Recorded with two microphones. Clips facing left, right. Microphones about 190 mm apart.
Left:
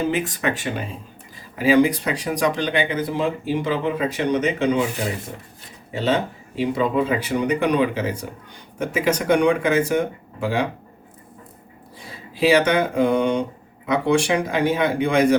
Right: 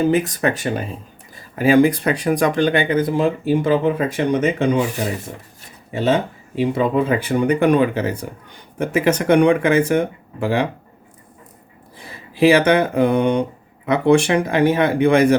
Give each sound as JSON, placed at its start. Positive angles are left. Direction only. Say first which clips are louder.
{"t": 0.1, "sound": "speech", "louder": "right 5 dB", "side_deg": -40}
{"t": 5.9, "sound": "speech", "louder": "right 3 dB", "side_deg": -55}
{"t": 11.9, "sound": "speech", "louder": "right 6 dB", "side_deg": -60}